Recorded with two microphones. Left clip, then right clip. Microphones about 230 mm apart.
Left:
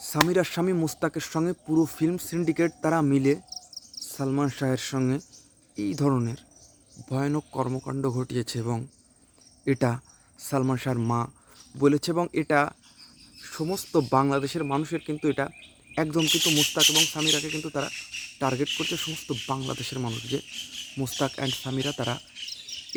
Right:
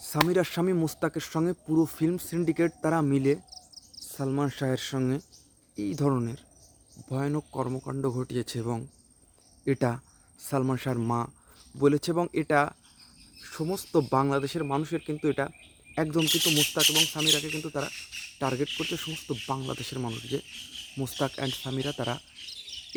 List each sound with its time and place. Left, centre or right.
0.0 s speech: centre
3.8 s insect: centre
5.7 s speech: centre
16.1 s speech: centre
17.0 s speech: centre